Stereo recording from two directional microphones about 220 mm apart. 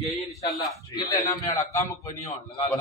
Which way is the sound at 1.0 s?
15° left (ahead or behind).